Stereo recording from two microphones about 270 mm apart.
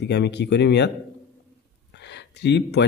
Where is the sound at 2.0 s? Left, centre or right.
Left.